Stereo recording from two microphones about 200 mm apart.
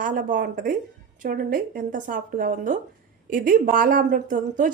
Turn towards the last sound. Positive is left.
turn(degrees=-40)  # may be behind; listen again after turning